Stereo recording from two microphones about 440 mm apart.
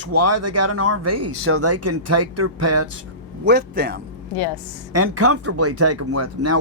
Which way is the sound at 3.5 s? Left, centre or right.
Right.